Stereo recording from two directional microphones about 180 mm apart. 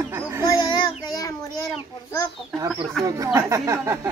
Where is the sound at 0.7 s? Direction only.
25° left (ahead or behind).